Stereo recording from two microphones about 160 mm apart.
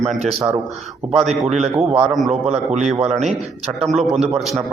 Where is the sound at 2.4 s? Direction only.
45° right (ahead or behind).